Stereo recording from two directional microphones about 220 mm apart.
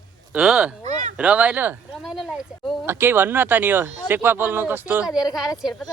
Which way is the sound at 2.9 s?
10° right (ahead or behind).